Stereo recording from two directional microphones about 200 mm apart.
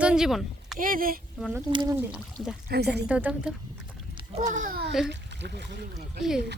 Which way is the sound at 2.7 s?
55° right (ahead or behind).